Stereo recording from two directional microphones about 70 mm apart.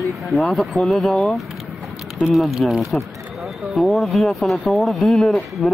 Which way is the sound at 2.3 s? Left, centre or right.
Centre.